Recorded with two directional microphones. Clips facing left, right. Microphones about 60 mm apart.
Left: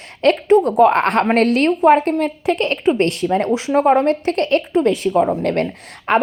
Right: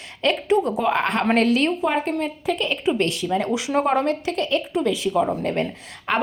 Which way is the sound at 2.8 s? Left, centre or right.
Left.